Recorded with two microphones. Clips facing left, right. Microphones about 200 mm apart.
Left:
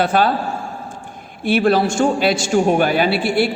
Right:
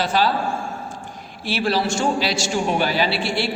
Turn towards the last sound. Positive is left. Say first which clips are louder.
# left 5 dB
turn(degrees=55)  # may be behind; listen again after turning